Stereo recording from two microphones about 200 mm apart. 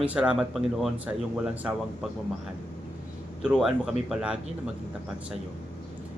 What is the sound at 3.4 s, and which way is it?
Speech, 5° right (ahead or behind).